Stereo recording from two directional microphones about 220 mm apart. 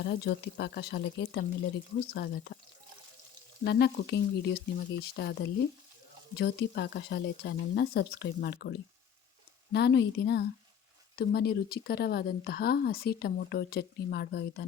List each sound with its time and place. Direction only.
0.0 s speech: 50° left (ahead or behind)
3.6 s speech: 50° left (ahead or behind)
9.7 s speech: 50° left (ahead or behind)